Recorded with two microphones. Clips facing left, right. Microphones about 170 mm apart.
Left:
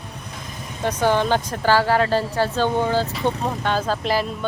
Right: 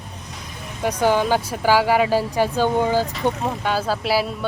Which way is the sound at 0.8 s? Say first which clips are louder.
Right 1 dB; 10° right (ahead or behind).